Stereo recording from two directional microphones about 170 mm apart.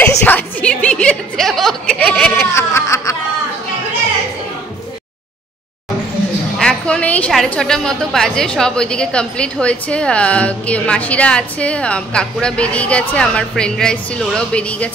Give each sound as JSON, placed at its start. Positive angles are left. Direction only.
{"t": 0.0, "sound": "speech", "side_deg": 10}
{"t": 2.5, "sound": "snicker", "side_deg": 15}
{"t": 6.6, "sound": "a woman's voice", "side_deg": 5}